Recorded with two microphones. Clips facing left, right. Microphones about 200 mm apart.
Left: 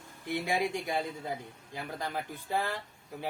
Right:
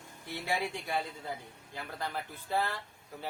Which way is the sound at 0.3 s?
15° left (ahead or behind).